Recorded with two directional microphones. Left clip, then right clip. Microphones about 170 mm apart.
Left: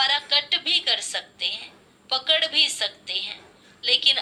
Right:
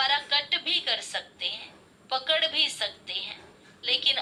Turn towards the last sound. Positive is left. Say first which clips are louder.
# left 5 dB
turn(degrees=15)  # may be behind; listen again after turning